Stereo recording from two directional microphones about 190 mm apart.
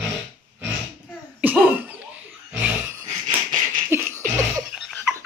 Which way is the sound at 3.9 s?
15° right (ahead or behind).